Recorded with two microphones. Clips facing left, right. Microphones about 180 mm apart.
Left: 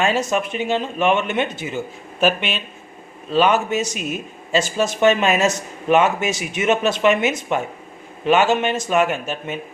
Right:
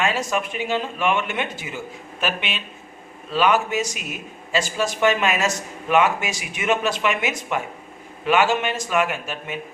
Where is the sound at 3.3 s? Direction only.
25° left (ahead or behind).